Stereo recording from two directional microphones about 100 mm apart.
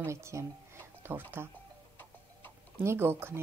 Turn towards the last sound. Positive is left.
turn(degrees=-20)  # may be behind; listen again after turning